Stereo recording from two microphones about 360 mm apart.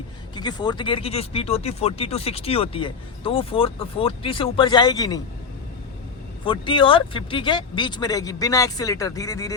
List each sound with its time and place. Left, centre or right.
0.3 s speech: centre
6.4 s speech: centre